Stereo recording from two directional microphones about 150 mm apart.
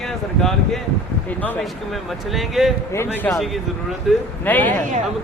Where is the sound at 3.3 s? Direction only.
Centre (ahead or behind).